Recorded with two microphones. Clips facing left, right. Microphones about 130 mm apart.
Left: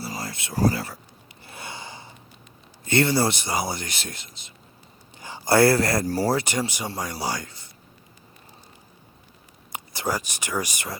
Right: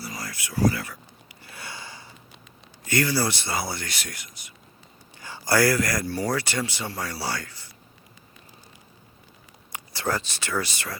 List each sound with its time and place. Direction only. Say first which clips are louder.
0.0 s a sound: left 3 dB; 25° left (ahead or behind)
0.5 s speech: left 1 dB; 35° left (ahead or behind)
1.5 s a sound: left 3 dB; 25° left (ahead or behind)
2.8 s speech: left 3 dB; 25° left (ahead or behind)
6.3 s speech: left 3 dB; 20° left (ahead or behind)
9.7 s speech: even; 20° left (ahead or behind)